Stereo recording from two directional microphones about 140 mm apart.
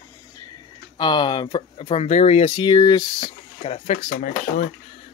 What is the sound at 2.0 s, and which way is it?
Speech, 50° left (ahead or behind).